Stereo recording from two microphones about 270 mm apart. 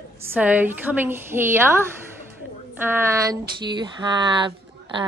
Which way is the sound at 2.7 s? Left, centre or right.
Centre.